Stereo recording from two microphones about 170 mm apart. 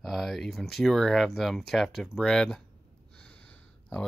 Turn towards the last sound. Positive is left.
turn(degrees=5)  # may be behind; listen again after turning